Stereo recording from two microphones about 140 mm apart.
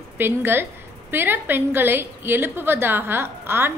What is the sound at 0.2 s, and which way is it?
A woman's voice, 15° right (ahead or behind).